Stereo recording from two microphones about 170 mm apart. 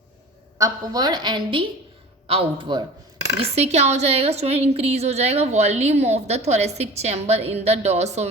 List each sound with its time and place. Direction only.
0.6 s a woman's voice: 25° right (ahead or behind); by 8.3 s 40° right (ahead or behind)